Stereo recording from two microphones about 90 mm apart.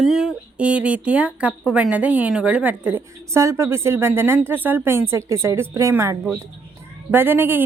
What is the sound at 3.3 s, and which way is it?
Speech, 35° right (ahead or behind).